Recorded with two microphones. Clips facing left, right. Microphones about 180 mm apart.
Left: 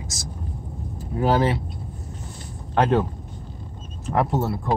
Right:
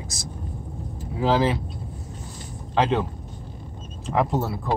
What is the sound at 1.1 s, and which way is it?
Speech, centre (ahead or behind).